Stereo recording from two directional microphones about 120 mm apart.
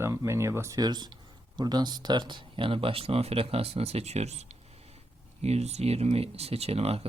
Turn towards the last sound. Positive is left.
turn(degrees=-55)  # may be behind; listen again after turning